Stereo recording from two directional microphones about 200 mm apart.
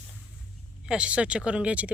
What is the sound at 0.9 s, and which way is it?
Speech, 5° right (ahead or behind).